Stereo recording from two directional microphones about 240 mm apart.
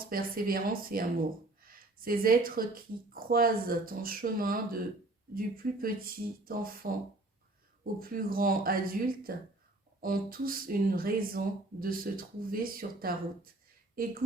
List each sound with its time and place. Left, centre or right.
0.1 s speech: right
7.9 s speech: right